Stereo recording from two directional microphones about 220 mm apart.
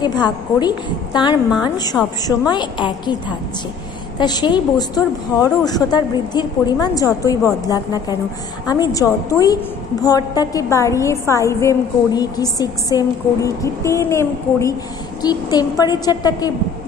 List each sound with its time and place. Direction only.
0.0 s a woman's voice: 20° left (ahead or behind)